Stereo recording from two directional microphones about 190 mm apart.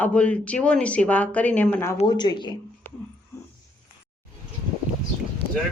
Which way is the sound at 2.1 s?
20° left (ahead or behind).